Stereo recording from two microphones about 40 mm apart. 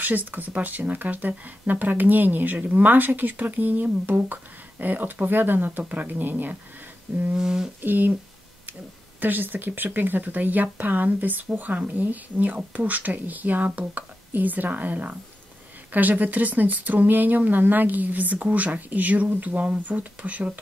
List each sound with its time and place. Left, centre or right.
0.0 s speech: right
5.9 s speech: right
7.3 s a sound: centre
7.8 s speech: right
9.2 s speech: right